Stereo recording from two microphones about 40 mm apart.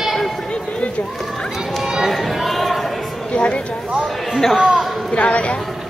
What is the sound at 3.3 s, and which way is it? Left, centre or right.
Speech, left.